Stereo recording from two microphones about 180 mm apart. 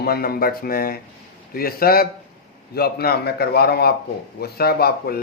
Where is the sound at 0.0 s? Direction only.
60° left (ahead or behind).